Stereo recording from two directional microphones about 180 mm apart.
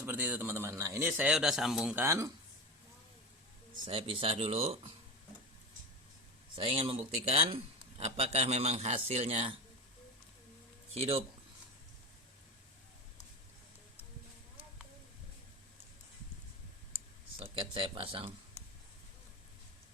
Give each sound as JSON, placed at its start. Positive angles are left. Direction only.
{"t": 0.0, "sound": "speech", "side_deg": -10}
{"t": 2.0, "sound": "speech", "side_deg": -15}
{"t": 3.8, "sound": "a man's voice", "side_deg": -30}
{"t": 6.6, "sound": "a man's voice", "side_deg": -30}
{"t": 10.9, "sound": "a man's voice", "side_deg": -30}
{"t": 17.4, "sound": "speech", "side_deg": -30}